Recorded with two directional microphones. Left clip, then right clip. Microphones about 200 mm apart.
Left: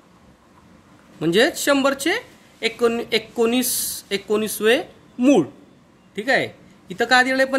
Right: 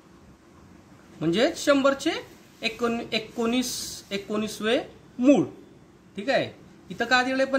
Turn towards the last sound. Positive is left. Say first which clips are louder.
# left 6 dB
turn(degrees=40)  # may be behind; listen again after turning